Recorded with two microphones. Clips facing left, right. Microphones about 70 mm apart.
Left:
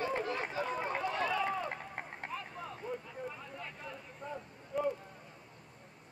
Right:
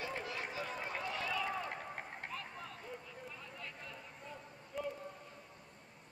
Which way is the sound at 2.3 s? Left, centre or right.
Centre.